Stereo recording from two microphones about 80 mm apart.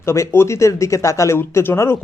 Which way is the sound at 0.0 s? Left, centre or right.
Left.